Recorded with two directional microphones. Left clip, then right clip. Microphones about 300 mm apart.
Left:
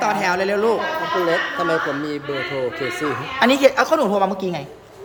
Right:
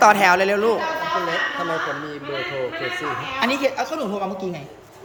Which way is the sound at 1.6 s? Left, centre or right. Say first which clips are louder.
Left 4 dB; left.